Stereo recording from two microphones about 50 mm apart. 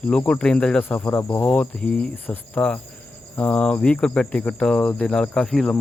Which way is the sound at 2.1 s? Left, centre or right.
Left.